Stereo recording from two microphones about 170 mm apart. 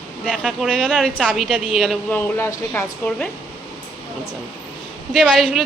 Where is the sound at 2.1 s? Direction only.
15° left (ahead or behind).